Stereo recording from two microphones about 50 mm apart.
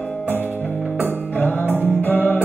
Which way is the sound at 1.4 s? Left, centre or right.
Left.